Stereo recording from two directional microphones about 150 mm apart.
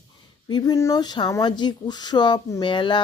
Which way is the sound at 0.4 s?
25° left (ahead or behind).